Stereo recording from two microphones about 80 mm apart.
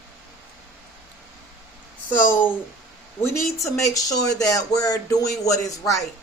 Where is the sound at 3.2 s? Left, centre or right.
Left.